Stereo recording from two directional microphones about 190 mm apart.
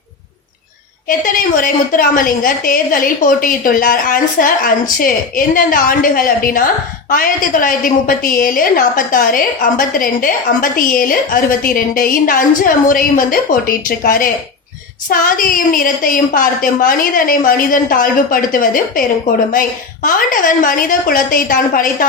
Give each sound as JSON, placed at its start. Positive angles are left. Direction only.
{"t": 1.0, "sound": "a woman's voice", "side_deg": 45}